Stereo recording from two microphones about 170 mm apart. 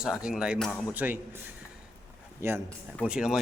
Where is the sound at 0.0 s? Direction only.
5° right (ahead or behind).